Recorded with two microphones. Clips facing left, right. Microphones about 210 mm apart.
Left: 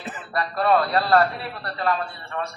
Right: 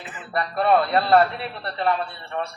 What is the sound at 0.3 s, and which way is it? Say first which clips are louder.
Speech: right 1 dB; 20° right (ahead or behind).